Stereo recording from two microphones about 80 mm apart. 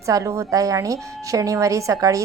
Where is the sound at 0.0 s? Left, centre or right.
Right.